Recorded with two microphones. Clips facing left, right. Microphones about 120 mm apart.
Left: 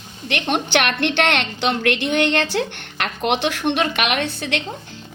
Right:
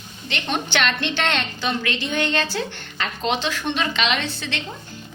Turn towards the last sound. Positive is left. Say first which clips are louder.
# left 4 dB
turn(degrees=55)  # may be behind; listen again after turning